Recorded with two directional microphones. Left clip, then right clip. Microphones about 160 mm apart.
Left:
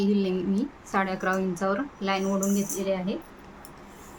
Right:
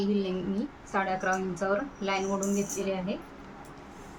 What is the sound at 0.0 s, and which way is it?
A woman's voice, 55° left (ahead or behind).